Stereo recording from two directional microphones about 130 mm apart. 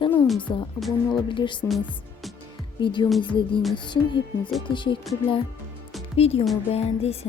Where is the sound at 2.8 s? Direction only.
35° left (ahead or behind).